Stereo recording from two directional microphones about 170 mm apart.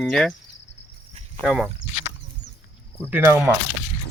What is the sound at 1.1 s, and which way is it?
Cricket, 40° right (ahead or behind).